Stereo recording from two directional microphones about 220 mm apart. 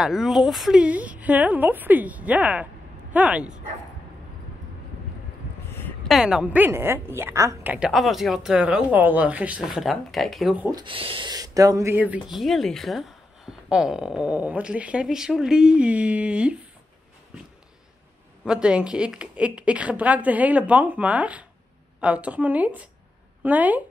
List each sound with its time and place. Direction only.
0.0 s speech: centre (ahead or behind)
5.7 s a woman's voice: 10° left (ahead or behind); by 10.8 s 5° right (ahead or behind)
10.8 s a woman's voice: 25° right (ahead or behind); by 16.5 s 5° right (ahead or behind)
18.4 s a woman's voice: 5° right (ahead or behind)